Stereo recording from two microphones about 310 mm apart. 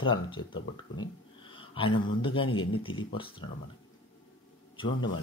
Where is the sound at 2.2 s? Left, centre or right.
Centre.